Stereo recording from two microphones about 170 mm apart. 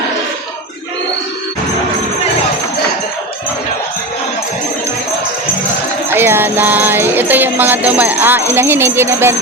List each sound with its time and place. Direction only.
6.1 s music: 15° right (ahead or behind)